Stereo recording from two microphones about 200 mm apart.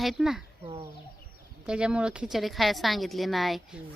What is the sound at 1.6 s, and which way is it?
A woman's voice, 5° right (ahead or behind).